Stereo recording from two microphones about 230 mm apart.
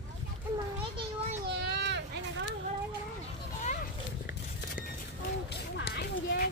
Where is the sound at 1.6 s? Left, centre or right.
Right.